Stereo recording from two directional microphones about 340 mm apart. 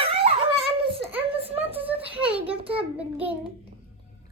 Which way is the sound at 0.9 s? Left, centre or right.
Centre.